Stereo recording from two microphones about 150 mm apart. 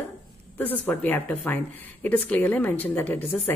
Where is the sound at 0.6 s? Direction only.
10° left (ahead or behind).